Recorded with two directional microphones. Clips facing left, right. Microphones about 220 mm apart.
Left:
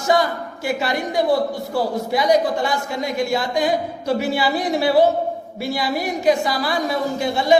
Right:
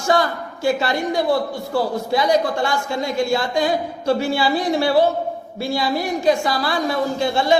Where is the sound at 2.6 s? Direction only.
20° left (ahead or behind).